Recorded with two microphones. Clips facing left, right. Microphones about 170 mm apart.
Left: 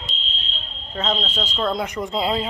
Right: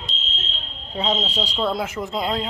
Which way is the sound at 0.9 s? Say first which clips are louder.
Right 1 dB; 15° right (ahead or behind).